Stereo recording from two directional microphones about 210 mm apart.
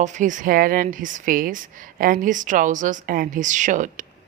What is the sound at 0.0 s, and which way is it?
Speech, 35° right (ahead or behind).